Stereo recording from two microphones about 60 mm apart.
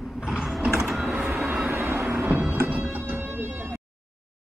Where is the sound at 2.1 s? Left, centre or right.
Right.